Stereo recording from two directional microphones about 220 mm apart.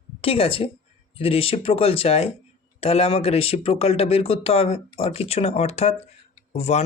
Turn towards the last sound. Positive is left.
turn(degrees=30)  # may be behind; listen again after turning